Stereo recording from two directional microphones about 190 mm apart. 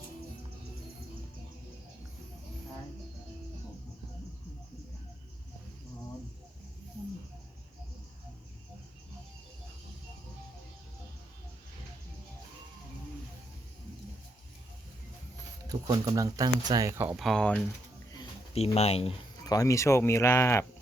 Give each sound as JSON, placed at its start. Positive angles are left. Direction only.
{"t": 15.7, "sound": "speech", "side_deg": -20}
{"t": 17.2, "sound": "speech", "side_deg": 0}
{"t": 18.1, "sound": "a sound", "side_deg": 30}
{"t": 19.5, "sound": "speech", "side_deg": 20}